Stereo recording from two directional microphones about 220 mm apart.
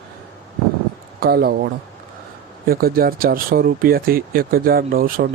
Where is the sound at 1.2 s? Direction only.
45° right (ahead or behind).